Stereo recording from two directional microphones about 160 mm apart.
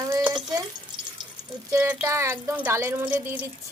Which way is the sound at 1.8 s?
10° right (ahead or behind).